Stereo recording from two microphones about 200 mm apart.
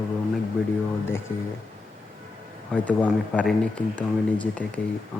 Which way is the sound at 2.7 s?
5° left (ahead or behind).